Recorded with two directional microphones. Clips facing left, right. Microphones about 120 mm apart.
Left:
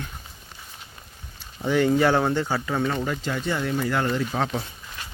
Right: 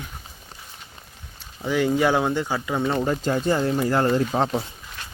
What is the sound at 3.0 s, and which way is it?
Speech, 35° right (ahead or behind).